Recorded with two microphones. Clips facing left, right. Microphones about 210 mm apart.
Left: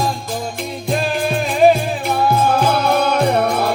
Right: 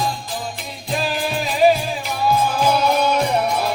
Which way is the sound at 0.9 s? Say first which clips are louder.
Left 3 dB; 55° left (ahead or behind).